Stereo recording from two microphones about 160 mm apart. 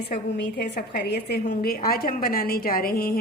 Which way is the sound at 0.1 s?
80° left.